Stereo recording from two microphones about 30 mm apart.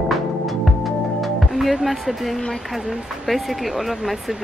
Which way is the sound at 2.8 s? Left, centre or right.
Centre.